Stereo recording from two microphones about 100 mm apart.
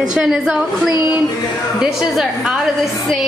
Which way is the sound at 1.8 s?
5° right (ahead or behind).